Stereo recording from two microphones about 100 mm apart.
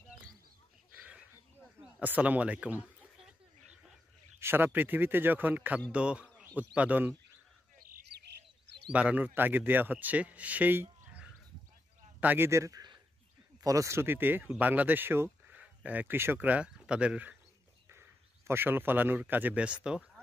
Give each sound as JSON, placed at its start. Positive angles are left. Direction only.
{"t": 2.0, "sound": "a man's voice", "side_deg": -15}
{"t": 4.4, "sound": "a man's voice", "side_deg": -20}
{"t": 8.9, "sound": "a man's voice", "side_deg": -15}
{"t": 12.4, "sound": "a man's voice", "side_deg": -30}
{"t": 18.5, "sound": "speech", "side_deg": -20}